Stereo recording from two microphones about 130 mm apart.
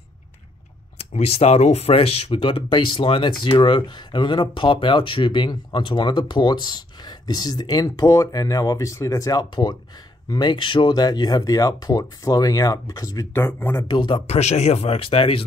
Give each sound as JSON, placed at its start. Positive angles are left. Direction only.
{"t": 0.9, "sound": "speech", "side_deg": 55}
{"t": 13.8, "sound": "speech", "side_deg": 35}
{"t": 14.2, "sound": "speech", "side_deg": 55}